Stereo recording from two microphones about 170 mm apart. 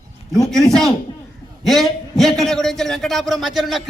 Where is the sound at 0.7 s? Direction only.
Centre (ahead or behind).